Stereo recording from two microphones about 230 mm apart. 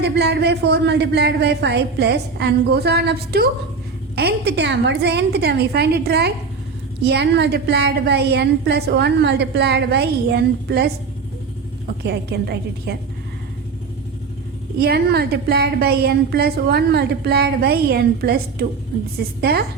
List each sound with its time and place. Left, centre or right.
0.0 s a woman's voice: right
12.0 s a woman's voice: right
14.8 s a woman's voice: right